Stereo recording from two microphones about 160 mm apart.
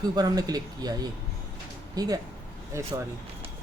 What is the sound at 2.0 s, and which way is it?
Speech, 25° right (ahead or behind).